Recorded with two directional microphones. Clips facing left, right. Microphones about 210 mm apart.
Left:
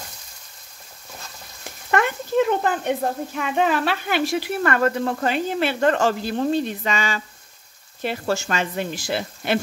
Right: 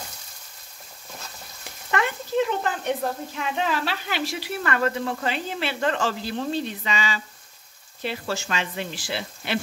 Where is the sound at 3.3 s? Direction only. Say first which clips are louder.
Left 6 dB; 55° left (ahead or behind).